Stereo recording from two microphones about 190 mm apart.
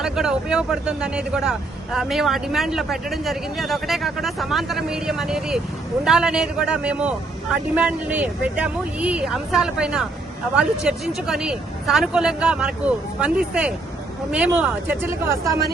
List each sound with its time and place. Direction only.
0.0 s speech: 5° right (ahead or behind)